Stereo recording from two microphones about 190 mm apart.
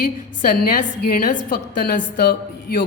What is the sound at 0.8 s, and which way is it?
A woman's voice, 50° left (ahead or behind).